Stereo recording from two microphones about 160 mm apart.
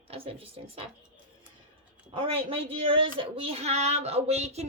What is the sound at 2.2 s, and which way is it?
A woman's voice, 35° right (ahead or behind).